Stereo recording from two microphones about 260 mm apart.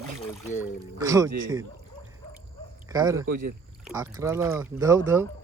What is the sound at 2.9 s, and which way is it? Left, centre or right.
Speech, centre.